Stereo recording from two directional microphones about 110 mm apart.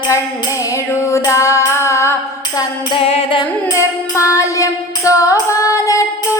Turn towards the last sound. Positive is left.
turn(degrees=30)  # may be behind; listen again after turning